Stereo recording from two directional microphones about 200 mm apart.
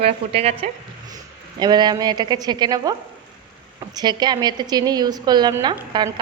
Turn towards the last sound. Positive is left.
turn(degrees=-20)  # may be behind; listen again after turning